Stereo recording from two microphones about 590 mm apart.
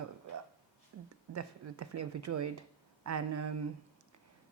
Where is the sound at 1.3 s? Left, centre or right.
Right.